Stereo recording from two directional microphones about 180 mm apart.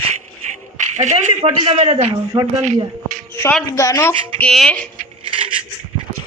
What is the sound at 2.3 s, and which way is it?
Speech, 25° right (ahead or behind).